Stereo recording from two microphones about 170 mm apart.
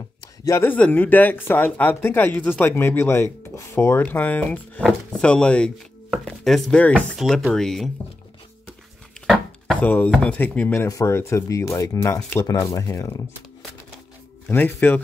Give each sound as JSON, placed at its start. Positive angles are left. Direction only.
{"t": 0.5, "sound": "speech", "side_deg": 15}
{"t": 9.3, "sound": "speech", "side_deg": 5}
{"t": 14.5, "sound": "speech", "side_deg": 10}